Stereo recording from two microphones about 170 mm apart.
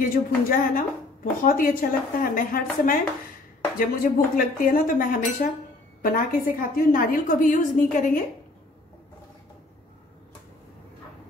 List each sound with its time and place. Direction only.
0.0 s a woman's voice: 55° left (ahead or behind)